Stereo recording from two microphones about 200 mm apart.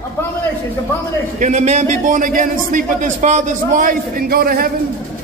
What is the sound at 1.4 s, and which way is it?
A man's voice, 35° right (ahead or behind).